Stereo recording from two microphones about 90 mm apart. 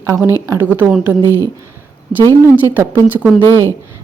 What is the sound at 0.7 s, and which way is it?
Speech, 20° right (ahead or behind).